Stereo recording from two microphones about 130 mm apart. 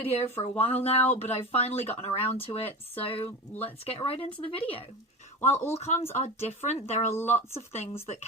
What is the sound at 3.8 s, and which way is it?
Speech, 50° left (ahead or behind).